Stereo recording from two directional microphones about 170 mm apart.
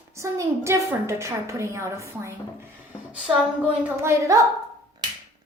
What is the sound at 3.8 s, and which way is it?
Speech, 15° right (ahead or behind).